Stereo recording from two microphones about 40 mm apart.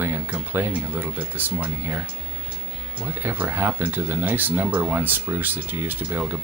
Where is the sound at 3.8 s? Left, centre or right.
Right.